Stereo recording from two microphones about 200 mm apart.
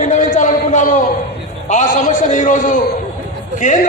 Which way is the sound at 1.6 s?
35° left (ahead or behind).